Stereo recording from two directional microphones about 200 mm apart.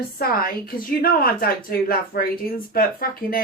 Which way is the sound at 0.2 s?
50° left (ahead or behind).